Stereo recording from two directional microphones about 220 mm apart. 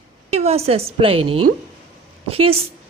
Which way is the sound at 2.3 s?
25° right (ahead or behind).